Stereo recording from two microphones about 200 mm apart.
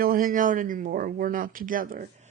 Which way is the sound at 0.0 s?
45° right (ahead or behind).